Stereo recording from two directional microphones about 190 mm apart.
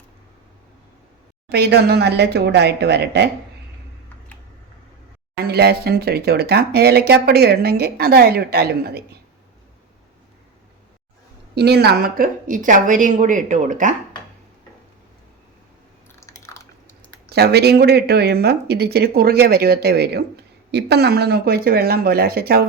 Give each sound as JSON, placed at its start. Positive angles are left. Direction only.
{"t": 1.5, "sound": "speech", "side_deg": -60}
{"t": 5.5, "sound": "speech", "side_deg": -60}
{"t": 11.5, "sound": "a woman's voice", "side_deg": -60}
{"t": 16.2, "sound": "a sound", "side_deg": 15}
{"t": 17.3, "sound": "speech", "side_deg": -60}